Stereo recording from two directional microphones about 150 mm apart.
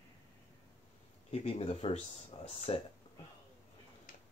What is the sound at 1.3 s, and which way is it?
Speech, 40° left (ahead or behind).